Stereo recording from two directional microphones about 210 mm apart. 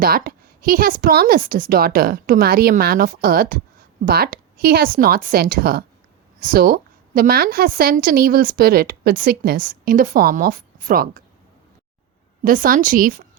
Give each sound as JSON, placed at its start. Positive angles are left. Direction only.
{"t": 0.0, "sound": "a woman's voice", "side_deg": -45}
{"t": 12.4, "sound": "a woman's voice", "side_deg": -40}